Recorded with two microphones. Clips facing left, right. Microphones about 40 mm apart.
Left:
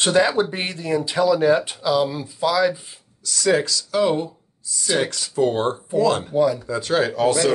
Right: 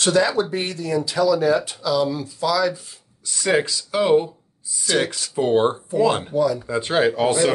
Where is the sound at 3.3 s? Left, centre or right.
Right.